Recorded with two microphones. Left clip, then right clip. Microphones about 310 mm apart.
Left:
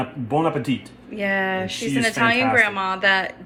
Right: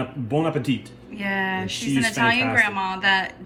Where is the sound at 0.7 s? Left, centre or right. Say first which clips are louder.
Even; left.